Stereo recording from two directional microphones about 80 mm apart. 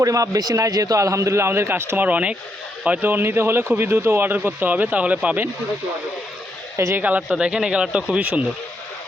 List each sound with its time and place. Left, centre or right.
0.0 s a man's voice: right
2.0 s speech: centre
6.7 s speech: right
7.2 s speech: centre